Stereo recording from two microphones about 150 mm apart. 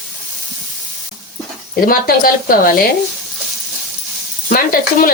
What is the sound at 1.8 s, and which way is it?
Speech, 75° left (ahead or behind).